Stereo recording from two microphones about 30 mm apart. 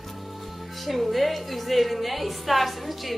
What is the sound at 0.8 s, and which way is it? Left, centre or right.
A woman's voice, centre.